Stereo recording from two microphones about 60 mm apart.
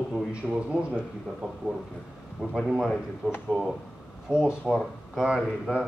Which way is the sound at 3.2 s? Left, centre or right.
Centre.